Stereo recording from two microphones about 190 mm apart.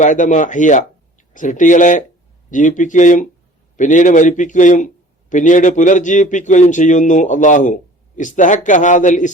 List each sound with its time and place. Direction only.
0.0 s a man's voice: 40° left (ahead or behind)